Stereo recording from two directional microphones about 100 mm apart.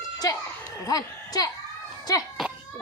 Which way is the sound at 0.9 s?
40° left (ahead or behind).